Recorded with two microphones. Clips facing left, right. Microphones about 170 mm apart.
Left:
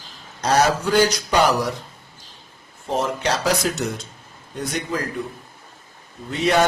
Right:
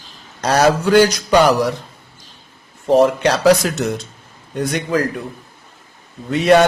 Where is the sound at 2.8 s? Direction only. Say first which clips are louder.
Right 10 dB; 65° right (ahead or behind).